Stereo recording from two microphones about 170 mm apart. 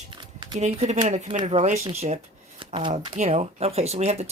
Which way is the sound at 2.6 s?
30° right (ahead or behind).